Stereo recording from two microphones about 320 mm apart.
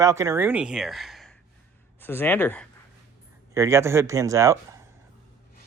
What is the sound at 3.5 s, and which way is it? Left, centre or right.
Speech, centre.